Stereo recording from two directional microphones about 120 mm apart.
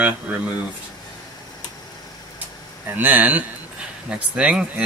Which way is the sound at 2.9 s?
15° right (ahead or behind).